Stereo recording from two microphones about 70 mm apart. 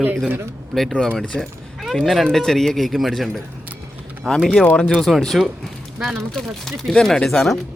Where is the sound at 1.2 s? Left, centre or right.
Centre.